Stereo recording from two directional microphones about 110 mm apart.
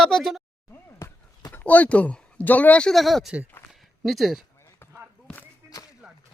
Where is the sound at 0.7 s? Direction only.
20° left (ahead or behind).